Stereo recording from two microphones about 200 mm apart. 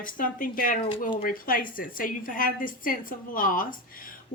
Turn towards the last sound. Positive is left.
turn(degrees=45)  # may be behind; listen again after turning